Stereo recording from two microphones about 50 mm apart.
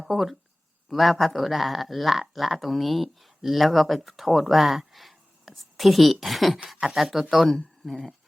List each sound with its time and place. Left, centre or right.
0.0 s speech: centre